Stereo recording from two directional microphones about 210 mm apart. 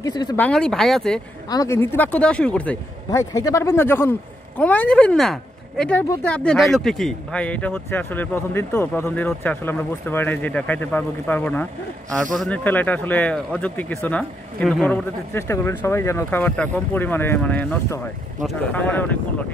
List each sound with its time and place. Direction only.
0.0 s speech: 20° left (ahead or behind)
0.4 s speech: 5° left (ahead or behind)
1.5 s speech: 15° left (ahead or behind)